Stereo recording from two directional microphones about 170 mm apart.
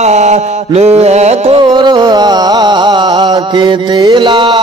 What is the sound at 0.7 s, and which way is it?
Music, 40° right (ahead or behind).